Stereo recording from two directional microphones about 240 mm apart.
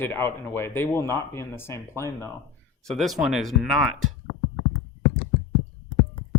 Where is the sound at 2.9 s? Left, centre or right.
Centre.